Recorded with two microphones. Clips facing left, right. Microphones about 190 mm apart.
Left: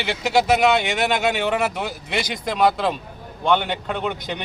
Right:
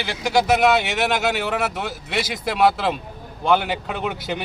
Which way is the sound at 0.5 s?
Centre (ahead or behind).